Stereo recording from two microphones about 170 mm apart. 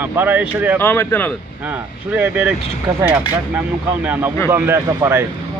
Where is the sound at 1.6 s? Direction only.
10° right (ahead or behind).